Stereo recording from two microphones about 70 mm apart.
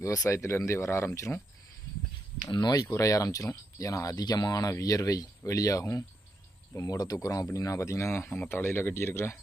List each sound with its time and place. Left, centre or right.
0.0 s speech: left
2.6 s speech: left
3.0 s speech: left
4.1 s speech: left
6.8 s speech: left